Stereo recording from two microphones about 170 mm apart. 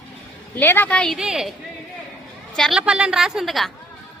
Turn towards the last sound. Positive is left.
turn(degrees=0)  # may be behind; listen again after turning